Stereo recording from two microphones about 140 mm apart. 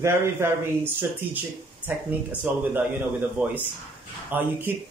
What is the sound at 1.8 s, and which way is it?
Speech, 10° right (ahead or behind).